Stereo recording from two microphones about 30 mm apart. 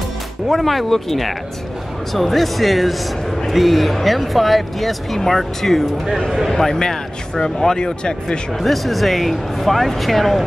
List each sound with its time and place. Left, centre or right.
0.5 s speech: centre; by 8.4 s left
8.5 s speech: centre